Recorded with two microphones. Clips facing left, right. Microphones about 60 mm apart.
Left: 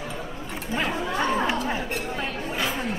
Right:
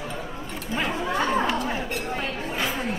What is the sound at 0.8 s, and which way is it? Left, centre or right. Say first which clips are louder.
Chatter: right 1 dB; centre.